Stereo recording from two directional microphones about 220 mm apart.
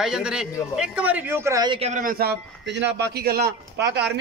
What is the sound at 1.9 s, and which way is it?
A man's voice, 40° right (ahead or behind).